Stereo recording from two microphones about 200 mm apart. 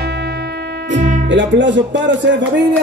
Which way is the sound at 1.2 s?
65° right (ahead or behind).